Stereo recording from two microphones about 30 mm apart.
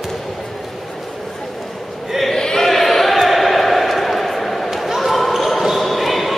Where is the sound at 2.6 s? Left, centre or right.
Centre.